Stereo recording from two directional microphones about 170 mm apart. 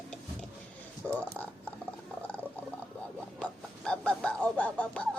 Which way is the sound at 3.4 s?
5° left (ahead or behind).